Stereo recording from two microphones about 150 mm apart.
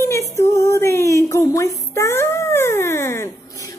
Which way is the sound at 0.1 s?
20° left (ahead or behind).